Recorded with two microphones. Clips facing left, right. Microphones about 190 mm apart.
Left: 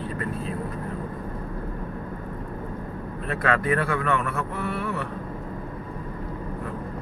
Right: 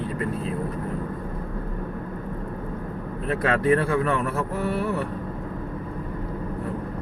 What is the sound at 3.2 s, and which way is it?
Speech, 30° right (ahead or behind).